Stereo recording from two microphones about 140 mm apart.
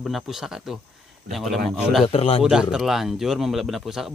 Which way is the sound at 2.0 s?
45° left (ahead or behind).